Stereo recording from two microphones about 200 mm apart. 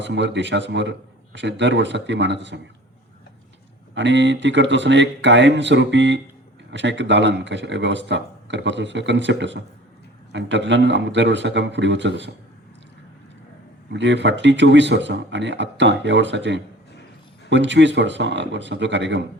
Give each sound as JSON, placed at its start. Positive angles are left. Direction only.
{"t": 0.0, "sound": "speech", "side_deg": -60}
{"t": 3.9, "sound": "speech", "side_deg": -65}
{"t": 13.9, "sound": "speech", "side_deg": -60}